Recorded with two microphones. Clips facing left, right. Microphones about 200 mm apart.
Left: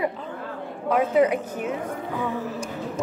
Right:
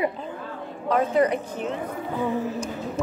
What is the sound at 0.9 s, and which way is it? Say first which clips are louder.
Speech: left 1 dB; 5° left (ahead or behind).